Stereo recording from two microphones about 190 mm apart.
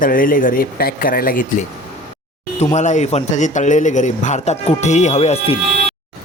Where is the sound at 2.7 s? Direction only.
40° left (ahead or behind).